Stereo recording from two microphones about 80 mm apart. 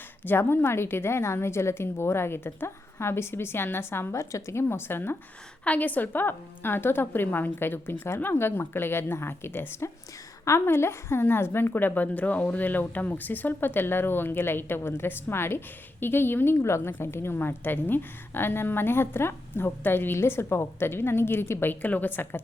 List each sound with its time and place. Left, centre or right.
0.3 s a woman's voice: left